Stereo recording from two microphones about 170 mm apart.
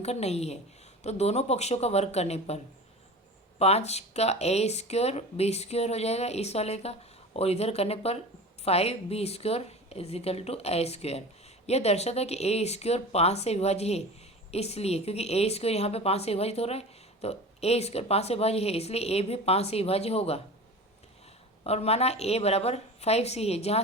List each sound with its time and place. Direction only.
0.0 s a woman's voice: 40° left (ahead or behind)
3.6 s a woman's voice: 40° left (ahead or behind)
21.6 s a woman's voice: 35° left (ahead or behind)